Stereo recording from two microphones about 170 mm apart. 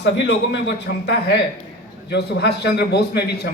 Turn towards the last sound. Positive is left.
turn(degrees=70)  # may be behind; listen again after turning